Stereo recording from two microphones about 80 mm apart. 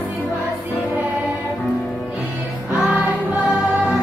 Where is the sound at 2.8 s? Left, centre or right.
Centre.